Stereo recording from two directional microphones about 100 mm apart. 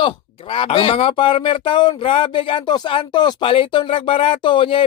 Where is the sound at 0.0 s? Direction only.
60° left (ahead or behind).